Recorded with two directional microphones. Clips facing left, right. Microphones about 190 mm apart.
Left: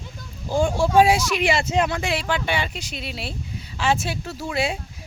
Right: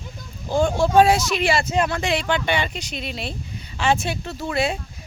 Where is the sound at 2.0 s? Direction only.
5° left (ahead or behind).